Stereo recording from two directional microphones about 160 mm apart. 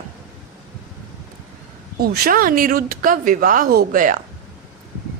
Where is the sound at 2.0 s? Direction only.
70° right (ahead or behind).